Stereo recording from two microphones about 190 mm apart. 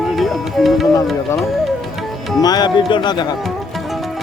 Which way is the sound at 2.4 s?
20° left (ahead or behind).